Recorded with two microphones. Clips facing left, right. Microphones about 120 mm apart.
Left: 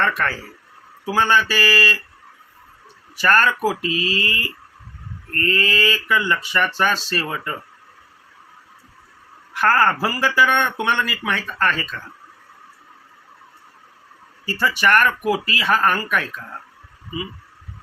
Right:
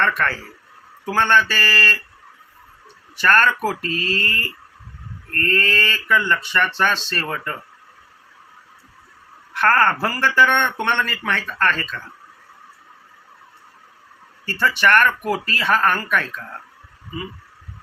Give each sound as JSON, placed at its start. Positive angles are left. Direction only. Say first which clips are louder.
{"t": 0.0, "sound": "speech", "louder": "right 1 dB", "side_deg": 5}
{"t": 3.2, "sound": "speech", "louder": "even", "side_deg": 5}
{"t": 9.5, "sound": "speech", "louder": "even", "side_deg": 5}
{"t": 14.4, "sound": "speech", "louder": "right 1 dB", "side_deg": 10}